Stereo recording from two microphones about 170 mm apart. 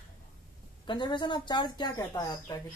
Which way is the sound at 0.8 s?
25° left (ahead or behind).